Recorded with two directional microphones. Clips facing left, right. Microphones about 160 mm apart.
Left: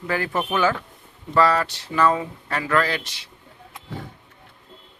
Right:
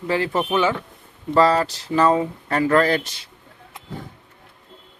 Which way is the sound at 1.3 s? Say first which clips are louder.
Right 2 dB; 35° right (ahead or behind).